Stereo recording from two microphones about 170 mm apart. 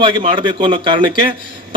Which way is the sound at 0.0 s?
30° right (ahead or behind).